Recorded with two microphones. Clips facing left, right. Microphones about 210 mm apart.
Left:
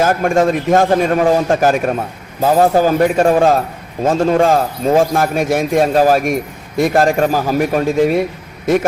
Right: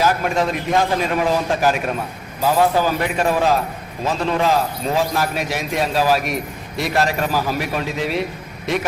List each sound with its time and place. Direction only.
0.0 s a man's voice: 50° left (ahead or behind)